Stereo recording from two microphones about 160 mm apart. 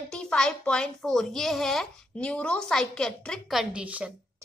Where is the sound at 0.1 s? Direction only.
5° left (ahead or behind).